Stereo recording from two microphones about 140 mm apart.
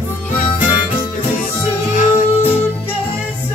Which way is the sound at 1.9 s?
50° left (ahead or behind).